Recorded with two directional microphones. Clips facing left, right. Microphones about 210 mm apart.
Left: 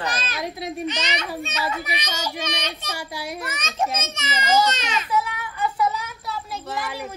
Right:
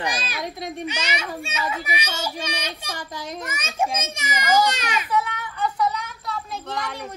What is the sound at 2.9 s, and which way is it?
Speech, 10° left (ahead or behind).